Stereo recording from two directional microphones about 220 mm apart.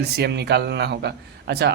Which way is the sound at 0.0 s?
50° right (ahead or behind).